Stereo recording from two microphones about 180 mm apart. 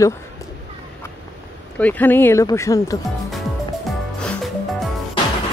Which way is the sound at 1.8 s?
10° left (ahead or behind).